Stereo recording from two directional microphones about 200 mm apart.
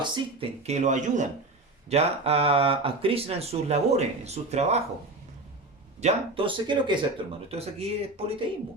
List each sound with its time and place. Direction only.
0.0 s speech: 30° right (ahead or behind)
6.0 s speech: 30° right (ahead or behind)